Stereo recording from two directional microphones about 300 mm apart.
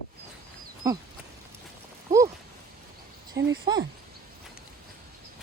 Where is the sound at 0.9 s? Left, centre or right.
Centre.